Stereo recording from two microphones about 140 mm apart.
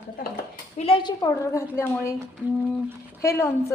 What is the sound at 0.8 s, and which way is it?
Speech, 40° left (ahead or behind).